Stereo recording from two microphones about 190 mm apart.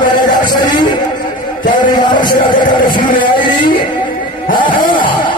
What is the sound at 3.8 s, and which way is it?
Vehicle, 25° left (ahead or behind).